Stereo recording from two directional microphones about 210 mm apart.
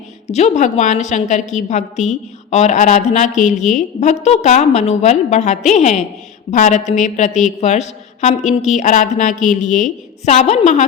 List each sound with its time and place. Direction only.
0.3 s a woman's voice: 35° left (ahead or behind)